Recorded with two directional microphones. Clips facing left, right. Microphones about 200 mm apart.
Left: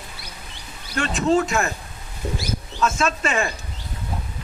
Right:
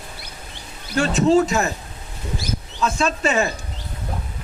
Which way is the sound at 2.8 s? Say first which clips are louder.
Right 2 dB; 35° right (ahead or behind).